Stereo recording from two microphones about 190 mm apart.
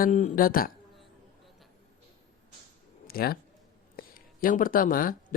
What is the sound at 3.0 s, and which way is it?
Speech, 50° left (ahead or behind).